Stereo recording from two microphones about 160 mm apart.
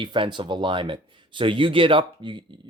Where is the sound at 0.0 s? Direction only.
30° right (ahead or behind).